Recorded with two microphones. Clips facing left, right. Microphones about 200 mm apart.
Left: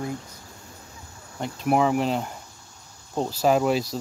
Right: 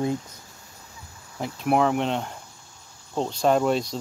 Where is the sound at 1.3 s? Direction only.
Centre (ahead or behind).